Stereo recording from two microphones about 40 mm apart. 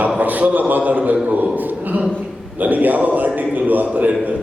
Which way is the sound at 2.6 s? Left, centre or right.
Right.